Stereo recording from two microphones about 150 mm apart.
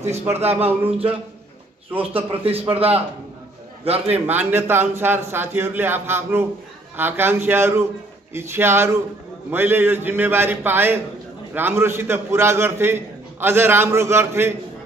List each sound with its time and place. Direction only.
0.4 s a man's voice: 45° right (ahead or behind)
4.3 s a man's voice: 15° right (ahead or behind)